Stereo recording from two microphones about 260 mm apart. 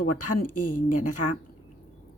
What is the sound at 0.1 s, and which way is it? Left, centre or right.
Speech, left.